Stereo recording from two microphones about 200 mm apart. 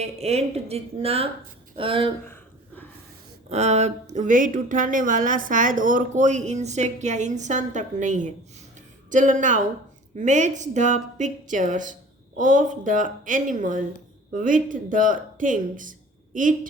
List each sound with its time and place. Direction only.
0.0 s speech: 30° right (ahead or behind)
2.2 s a sound: 10° left (ahead or behind)
3.5 s speech: 35° right (ahead or behind)